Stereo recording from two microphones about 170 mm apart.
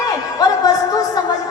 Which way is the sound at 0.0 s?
20° left (ahead or behind).